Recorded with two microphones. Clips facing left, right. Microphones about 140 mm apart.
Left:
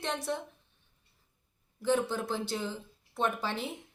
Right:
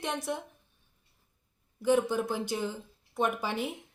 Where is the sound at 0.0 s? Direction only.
15° right (ahead or behind).